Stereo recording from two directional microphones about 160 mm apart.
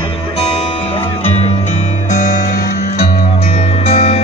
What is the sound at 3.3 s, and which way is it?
Music, 40° left (ahead or behind).